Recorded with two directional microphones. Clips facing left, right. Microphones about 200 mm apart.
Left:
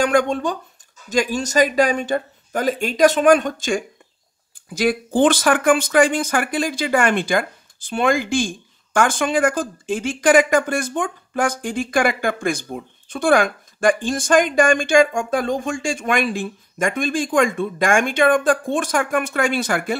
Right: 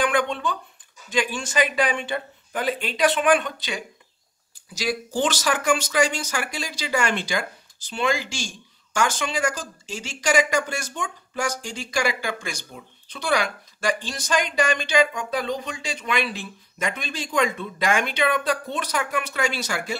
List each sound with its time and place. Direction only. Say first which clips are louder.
0.0 s speech: left 5 dB; 45° left (ahead or behind)